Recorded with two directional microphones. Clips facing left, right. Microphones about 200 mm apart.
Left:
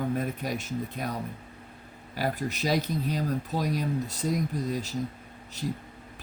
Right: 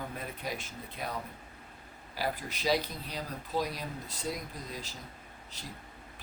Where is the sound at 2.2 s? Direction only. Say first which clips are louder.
Left 5 dB; 45° left (ahead or behind).